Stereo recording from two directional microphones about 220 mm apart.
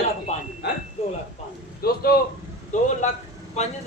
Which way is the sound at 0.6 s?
50° left (ahead or behind).